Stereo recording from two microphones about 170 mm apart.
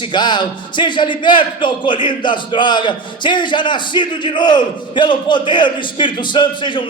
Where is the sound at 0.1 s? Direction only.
25° left (ahead or behind).